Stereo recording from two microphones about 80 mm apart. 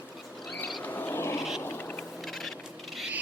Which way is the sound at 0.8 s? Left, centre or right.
Left.